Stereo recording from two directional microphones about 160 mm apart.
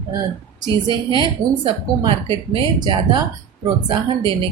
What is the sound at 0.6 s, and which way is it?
A woman's voice, 25° right (ahead or behind).